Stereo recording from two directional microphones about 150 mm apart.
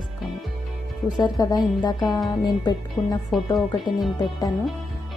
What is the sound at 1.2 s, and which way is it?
Speech, 25° left (ahead or behind).